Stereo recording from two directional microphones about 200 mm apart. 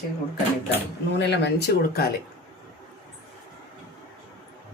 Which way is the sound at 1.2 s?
55° left (ahead or behind).